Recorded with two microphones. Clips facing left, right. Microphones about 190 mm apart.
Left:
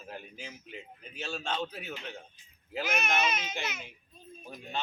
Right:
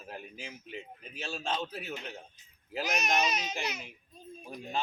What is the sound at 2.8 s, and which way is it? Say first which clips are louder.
Speech: even; 40° right (ahead or behind).